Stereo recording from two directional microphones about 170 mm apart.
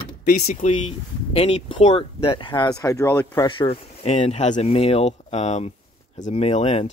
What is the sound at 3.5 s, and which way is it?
Speech, 30° left (ahead or behind).